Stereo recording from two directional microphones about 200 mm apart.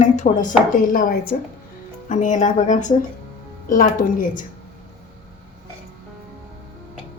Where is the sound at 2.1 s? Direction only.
35° left (ahead or behind).